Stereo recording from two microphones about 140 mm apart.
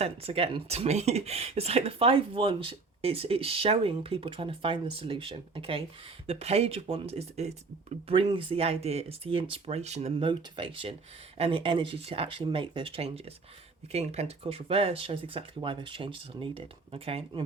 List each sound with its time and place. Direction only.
0.0 s speech: 45° right (ahead or behind)